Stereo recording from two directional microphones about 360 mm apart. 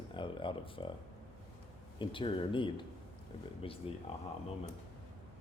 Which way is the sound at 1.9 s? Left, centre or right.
Centre.